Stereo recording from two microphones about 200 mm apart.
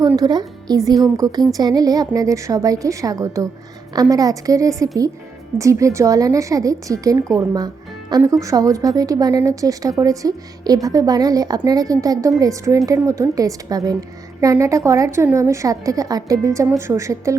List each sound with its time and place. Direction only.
0.0 s a woman's voice: 20° right (ahead or behind)